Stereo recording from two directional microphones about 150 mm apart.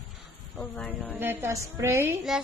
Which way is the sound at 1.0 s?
10° right (ahead or behind).